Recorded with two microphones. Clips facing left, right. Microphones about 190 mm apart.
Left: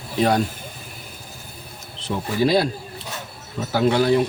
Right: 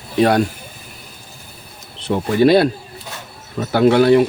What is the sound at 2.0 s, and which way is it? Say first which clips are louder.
A man's voice: right 7 dB; 65° right (ahead or behind).